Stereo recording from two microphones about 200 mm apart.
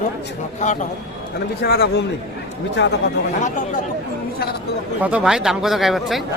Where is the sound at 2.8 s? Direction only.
65° left (ahead or behind).